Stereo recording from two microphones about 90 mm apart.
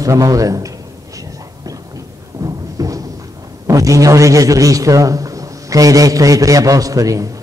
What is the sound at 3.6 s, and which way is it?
A man's voice, 40° right (ahead or behind).